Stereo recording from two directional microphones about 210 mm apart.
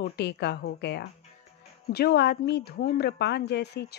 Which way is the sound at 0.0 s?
55° left (ahead or behind).